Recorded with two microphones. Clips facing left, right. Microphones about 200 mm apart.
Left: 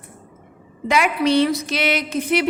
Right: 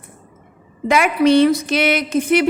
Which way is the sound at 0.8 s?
50° right (ahead or behind).